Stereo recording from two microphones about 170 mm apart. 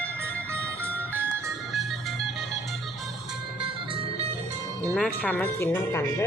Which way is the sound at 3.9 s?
30° right (ahead or behind).